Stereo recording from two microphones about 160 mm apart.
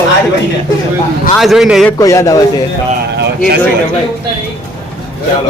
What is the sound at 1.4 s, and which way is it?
Speech, centre (ahead or behind).